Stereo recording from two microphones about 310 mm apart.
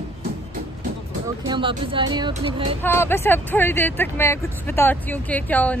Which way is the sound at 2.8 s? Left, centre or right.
Centre.